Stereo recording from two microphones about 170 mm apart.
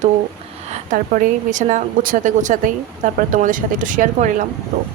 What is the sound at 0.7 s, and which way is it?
A woman's voice, 50° right (ahead or behind).